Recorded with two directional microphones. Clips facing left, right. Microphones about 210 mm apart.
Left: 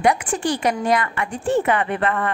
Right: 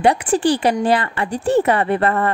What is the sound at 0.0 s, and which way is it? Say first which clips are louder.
Speech: right 4 dB; 35° right (ahead or behind).